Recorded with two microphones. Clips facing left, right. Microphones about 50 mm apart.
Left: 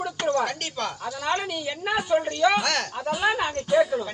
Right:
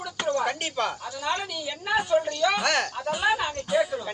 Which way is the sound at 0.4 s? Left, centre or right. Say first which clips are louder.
Right 2 dB; centre.